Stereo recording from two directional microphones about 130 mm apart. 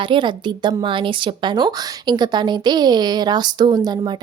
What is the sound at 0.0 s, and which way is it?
Speech, 40° right (ahead or behind).